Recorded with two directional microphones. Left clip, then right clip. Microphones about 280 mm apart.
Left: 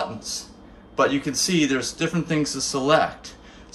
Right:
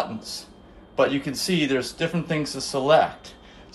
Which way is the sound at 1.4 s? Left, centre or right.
Left.